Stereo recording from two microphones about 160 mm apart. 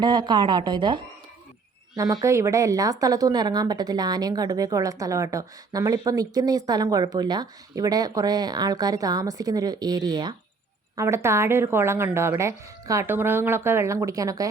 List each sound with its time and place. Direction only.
0.0 s a woman's voice: 25° right (ahead or behind)
2.0 s a woman's voice: 20° right (ahead or behind)